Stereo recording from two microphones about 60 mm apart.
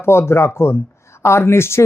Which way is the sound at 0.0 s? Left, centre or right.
Left.